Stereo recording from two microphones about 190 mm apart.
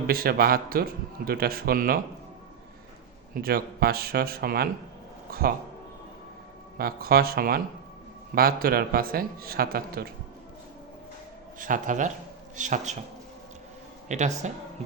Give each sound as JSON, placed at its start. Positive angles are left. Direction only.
{"t": 0.1, "sound": "a man's voice", "side_deg": -50}
{"t": 3.4, "sound": "a man's voice", "side_deg": -55}
{"t": 6.7, "sound": "a man's voice", "side_deg": -50}
{"t": 11.6, "sound": "a man's voice", "side_deg": -45}
{"t": 14.1, "sound": "speech", "side_deg": -40}